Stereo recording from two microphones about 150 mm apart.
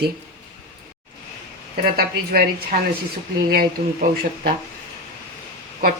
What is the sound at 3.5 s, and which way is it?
Speech, 85° right.